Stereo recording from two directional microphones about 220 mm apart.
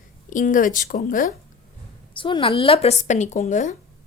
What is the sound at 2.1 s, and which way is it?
Speech, 20° left (ahead or behind).